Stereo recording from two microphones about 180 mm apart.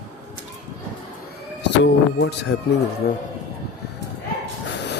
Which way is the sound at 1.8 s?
80° left.